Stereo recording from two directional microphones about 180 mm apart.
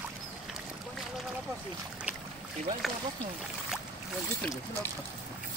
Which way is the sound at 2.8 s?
Centre (ahead or behind).